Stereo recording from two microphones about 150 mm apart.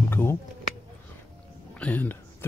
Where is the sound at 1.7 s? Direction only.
10° left (ahead or behind).